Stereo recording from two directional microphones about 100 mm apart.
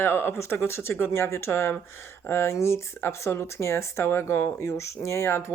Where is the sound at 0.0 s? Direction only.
25° left (ahead or behind).